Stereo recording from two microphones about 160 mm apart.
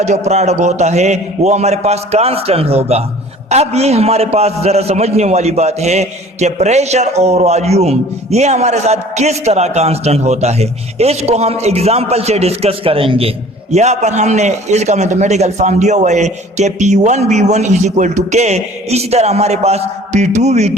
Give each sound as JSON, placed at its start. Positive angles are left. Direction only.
{"t": 0.0, "sound": "a man's voice", "side_deg": -45}